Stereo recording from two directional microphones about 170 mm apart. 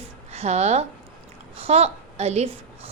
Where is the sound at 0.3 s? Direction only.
40° right (ahead or behind).